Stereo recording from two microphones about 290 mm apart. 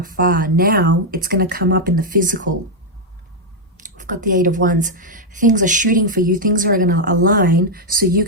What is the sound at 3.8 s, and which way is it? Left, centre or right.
A woman's voice, right.